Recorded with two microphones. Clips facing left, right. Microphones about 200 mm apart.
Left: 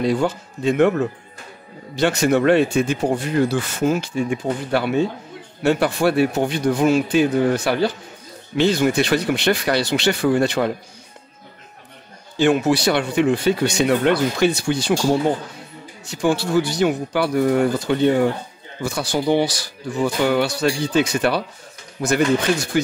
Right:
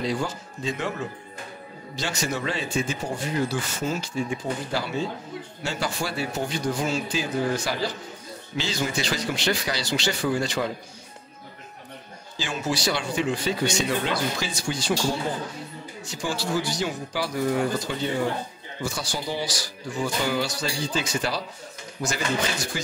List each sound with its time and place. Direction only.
0.0 s speech: 60° left (ahead or behind)
12.4 s speech: 60° left (ahead or behind)
16.1 s speech: 60° left (ahead or behind)